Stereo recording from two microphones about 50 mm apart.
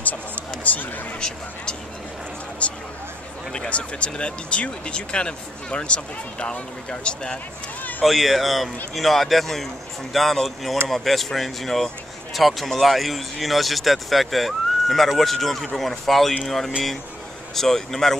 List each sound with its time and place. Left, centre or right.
0.7 s speech: left
2.6 s speech: left
8.0 s speech: centre